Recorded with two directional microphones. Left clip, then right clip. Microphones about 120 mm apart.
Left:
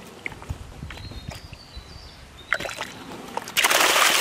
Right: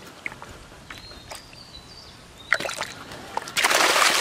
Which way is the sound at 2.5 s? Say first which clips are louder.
Right 2 dB; 20° right (ahead or behind).